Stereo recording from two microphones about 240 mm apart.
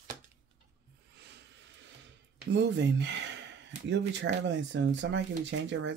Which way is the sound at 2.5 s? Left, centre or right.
Right.